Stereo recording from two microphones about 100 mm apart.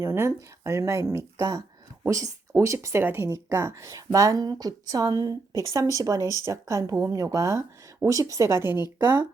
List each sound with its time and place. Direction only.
0.0 s speech: 25° right (ahead or behind)